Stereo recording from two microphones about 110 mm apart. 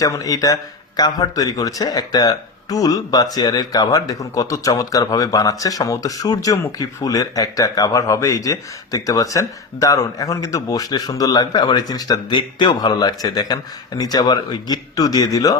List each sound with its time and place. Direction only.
0.0 s speech: 30° left (ahead or behind)